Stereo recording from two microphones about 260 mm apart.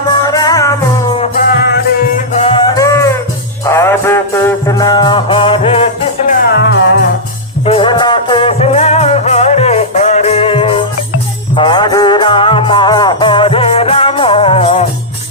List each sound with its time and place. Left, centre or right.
0.3 s music: centre
1.2 s music: left
2.3 s music: left
7.6 s music: left